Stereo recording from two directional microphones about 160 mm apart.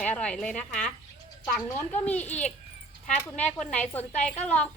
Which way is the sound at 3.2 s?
10° left (ahead or behind).